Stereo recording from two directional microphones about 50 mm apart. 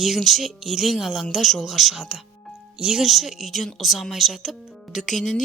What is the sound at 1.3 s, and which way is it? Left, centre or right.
Speech, centre.